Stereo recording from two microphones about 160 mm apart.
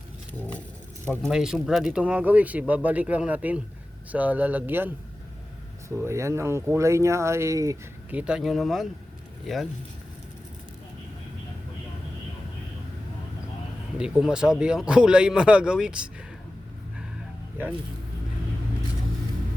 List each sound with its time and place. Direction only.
0.3 s vehicle: 10° left (ahead or behind)
1.2 s speech: 5° right (ahead or behind)
5.9 s speech: 15° right (ahead or behind)
8.1 s speech: 5° right (ahead or behind)
14.0 s speech: 5° right (ahead or behind)